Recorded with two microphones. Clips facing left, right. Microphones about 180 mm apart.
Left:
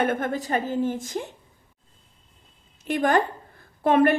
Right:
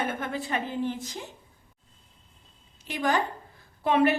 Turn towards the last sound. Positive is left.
turn(degrees=50)  # may be behind; listen again after turning